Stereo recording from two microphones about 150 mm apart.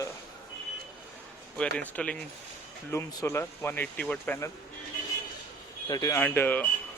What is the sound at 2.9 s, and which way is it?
Speech, 20° left (ahead or behind).